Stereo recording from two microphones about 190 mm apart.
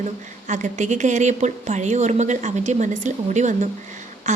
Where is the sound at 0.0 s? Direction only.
40° right (ahead or behind).